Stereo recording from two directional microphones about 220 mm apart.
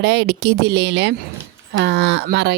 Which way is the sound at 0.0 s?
50° right (ahead or behind).